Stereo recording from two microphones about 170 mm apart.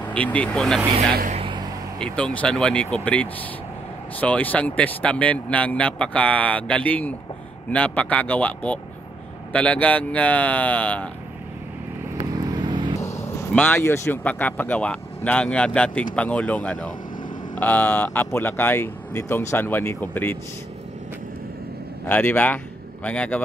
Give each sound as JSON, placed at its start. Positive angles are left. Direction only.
{"t": 0.1, "sound": "speech", "side_deg": 10}
{"t": 1.3, "sound": "vehicle", "side_deg": -30}
{"t": 2.0, "sound": "speech", "side_deg": 5}
{"t": 12.2, "sound": "vehicle", "side_deg": -20}
{"t": 13.0, "sound": "speech", "side_deg": 15}
{"t": 22.0, "sound": "speech", "side_deg": 10}